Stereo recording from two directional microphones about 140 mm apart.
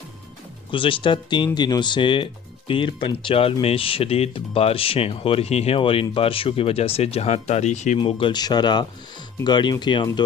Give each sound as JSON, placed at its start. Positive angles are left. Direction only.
{"t": 0.7, "sound": "speech", "side_deg": 40}
{"t": 7.9, "sound": "speech", "side_deg": 35}